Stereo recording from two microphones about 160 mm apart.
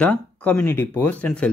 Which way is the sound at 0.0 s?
10° left (ahead or behind).